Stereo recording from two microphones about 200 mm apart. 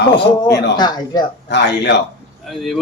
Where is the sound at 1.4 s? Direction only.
60° left (ahead or behind).